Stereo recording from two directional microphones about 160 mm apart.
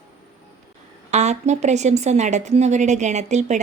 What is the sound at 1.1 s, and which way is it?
A woman's voice, 45° right (ahead or behind).